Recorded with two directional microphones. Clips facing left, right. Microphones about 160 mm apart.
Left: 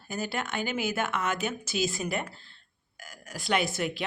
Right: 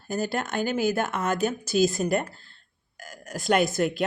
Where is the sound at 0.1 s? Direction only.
40° right (ahead or behind).